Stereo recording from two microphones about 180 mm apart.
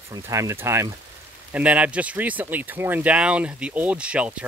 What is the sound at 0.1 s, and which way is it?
Speech, 15° right (ahead or behind).